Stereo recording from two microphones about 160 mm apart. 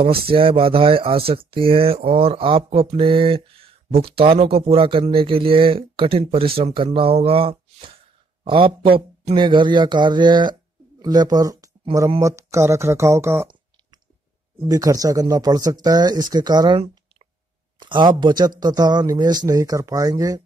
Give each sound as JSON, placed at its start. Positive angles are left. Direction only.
{"t": 0.0, "sound": "speech", "side_deg": -35}
{"t": 14.7, "sound": "speech", "side_deg": -20}